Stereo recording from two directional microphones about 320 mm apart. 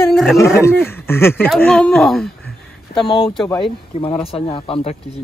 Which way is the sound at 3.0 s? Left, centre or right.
Centre.